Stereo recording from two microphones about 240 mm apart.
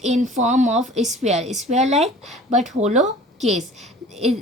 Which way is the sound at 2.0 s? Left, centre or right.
Centre.